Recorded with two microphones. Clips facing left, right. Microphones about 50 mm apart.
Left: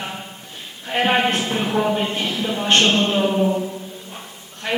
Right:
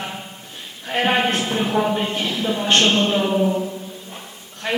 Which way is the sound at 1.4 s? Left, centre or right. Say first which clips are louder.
Even; centre.